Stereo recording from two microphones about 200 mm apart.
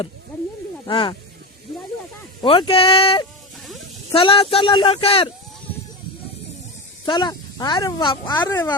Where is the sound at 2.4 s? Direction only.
25° left (ahead or behind).